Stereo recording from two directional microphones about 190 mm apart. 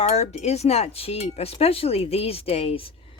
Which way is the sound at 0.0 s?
35° left (ahead or behind).